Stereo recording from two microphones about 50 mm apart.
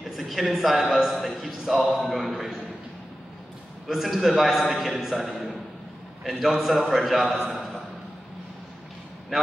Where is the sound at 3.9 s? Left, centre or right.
Centre.